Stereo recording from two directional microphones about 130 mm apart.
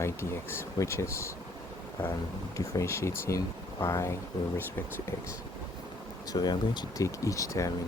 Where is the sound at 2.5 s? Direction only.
20° left (ahead or behind).